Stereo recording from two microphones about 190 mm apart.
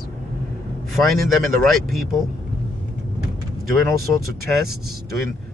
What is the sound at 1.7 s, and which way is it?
Speech, centre (ahead or behind).